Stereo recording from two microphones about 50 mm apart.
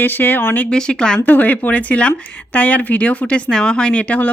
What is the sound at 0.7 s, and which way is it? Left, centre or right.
Speech, centre.